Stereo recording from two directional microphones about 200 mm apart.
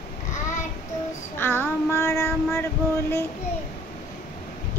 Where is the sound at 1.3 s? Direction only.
10° left (ahead or behind).